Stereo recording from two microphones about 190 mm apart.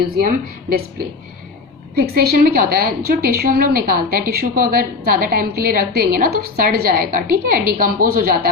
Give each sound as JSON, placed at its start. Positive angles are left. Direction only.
{"t": 0.2, "sound": "a woman's voice", "side_deg": -50}